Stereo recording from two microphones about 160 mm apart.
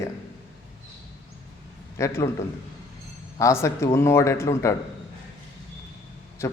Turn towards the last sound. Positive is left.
turn(degrees=15)  # may be behind; listen again after turning